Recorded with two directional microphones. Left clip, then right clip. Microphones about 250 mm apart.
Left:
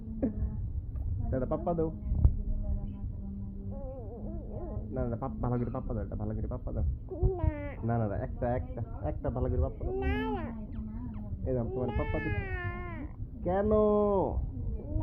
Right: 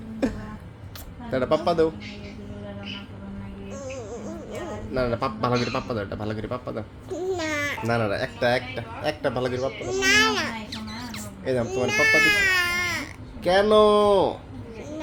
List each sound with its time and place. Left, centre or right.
1.3 s speech: centre
4.9 s speech: centre
7.3 s babbling: right
7.9 s speech: centre
11.1 s baby cry: centre
13.4 s speech: centre